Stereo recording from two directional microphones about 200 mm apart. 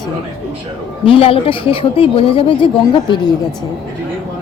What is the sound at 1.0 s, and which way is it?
Speech, 30° left (ahead or behind).